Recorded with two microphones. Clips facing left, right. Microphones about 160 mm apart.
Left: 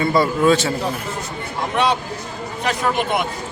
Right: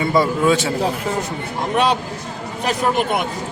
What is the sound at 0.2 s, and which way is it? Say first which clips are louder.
Speech: even; 10° right (ahead or behind).